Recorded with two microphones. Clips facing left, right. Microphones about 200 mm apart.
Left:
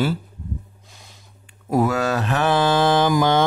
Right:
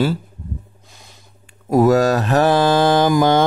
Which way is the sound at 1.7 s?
40° right (ahead or behind).